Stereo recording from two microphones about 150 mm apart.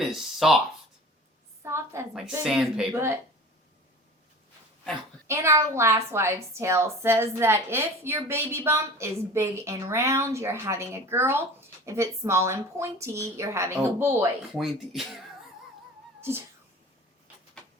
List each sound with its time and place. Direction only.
0.0 s a sound: centre (ahead or behind)
1.6 s a sound: 20° right (ahead or behind)
2.4 s speech: 5° right (ahead or behind)
2.9 s a woman's voice: 15° right (ahead or behind)
5.3 s a woman's voice: 20° right (ahead or behind)
14.5 s speech: centre (ahead or behind)